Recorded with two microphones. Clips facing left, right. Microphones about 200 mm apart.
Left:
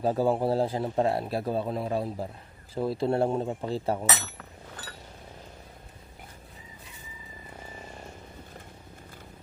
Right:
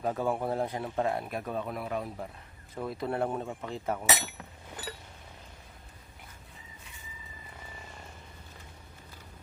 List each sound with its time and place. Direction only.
0.0 s a man's voice: 30° left (ahead or behind)
4.1 s speech: 15° right (ahead or behind)